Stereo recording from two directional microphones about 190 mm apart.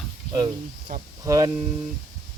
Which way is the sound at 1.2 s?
15° right (ahead or behind).